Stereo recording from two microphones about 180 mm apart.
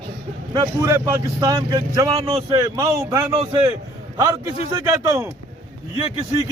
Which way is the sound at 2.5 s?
20° right (ahead or behind).